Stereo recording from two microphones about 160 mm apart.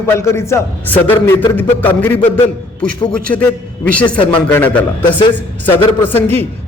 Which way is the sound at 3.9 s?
10° left (ahead or behind).